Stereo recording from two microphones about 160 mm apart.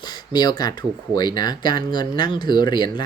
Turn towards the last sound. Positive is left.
turn(degrees=25)  # may be behind; listen again after turning